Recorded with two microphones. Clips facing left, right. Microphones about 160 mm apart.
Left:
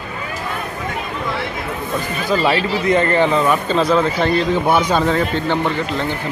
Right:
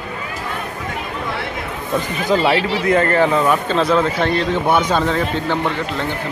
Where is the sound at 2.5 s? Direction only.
80° right.